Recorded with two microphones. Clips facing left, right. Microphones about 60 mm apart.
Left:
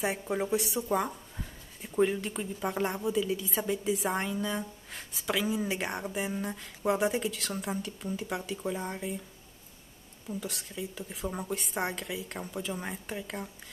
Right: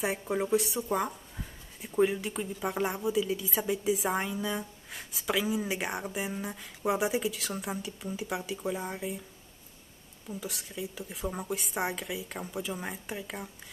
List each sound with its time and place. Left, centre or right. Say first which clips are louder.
0.0 s speech: even; centre
10.2 s speech: left 1 dB; centre